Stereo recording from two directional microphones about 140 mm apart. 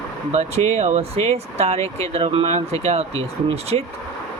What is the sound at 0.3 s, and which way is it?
Speech, 50° right (ahead or behind).